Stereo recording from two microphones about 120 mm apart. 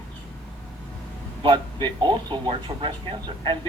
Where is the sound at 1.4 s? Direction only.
45° right (ahead or behind).